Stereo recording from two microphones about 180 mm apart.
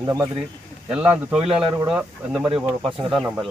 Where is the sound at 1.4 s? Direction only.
30° right (ahead or behind).